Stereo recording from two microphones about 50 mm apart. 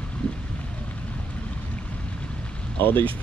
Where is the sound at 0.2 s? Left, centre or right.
Left.